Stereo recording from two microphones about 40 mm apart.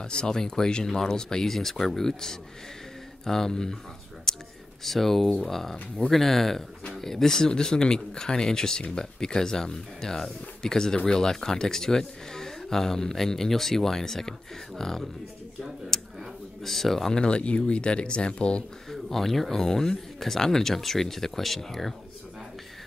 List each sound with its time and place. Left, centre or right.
0.0 s speech: left
4.3 s whispering: centre
4.8 s speech: centre
15.9 s a sound: centre
16.6 s speech: centre
17.1 s speech: left
18.9 s speech: centre